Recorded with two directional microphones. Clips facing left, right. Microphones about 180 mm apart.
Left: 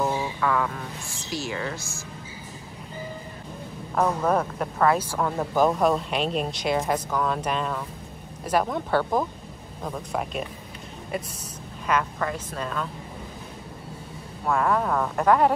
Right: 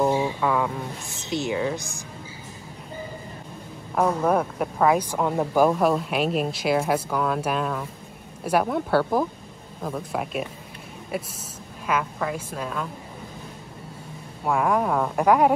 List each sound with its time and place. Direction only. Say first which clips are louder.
0.0 s speech: right 4 dB; 15° right (ahead or behind)
3.9 s speech: right 2 dB; 10° right (ahead or behind)
11.8 s speech: even; 5° right (ahead or behind)
14.4 s speech: right 1 dB; 10° right (ahead or behind)